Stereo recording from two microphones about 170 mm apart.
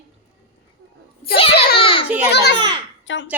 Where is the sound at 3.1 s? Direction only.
90° left.